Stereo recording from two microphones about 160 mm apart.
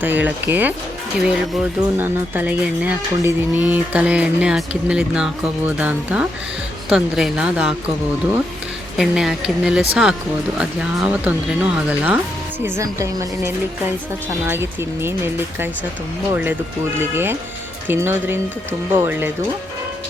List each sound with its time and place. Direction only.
0.0 s speech: 10° right (ahead or behind)
9.0 s speech: 5° right (ahead or behind)
16.3 s speech: 10° right (ahead or behind)